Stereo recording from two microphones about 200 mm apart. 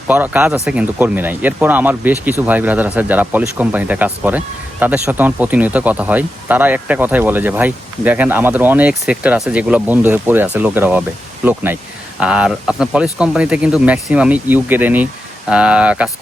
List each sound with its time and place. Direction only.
0.1 s speech: 10° right (ahead or behind)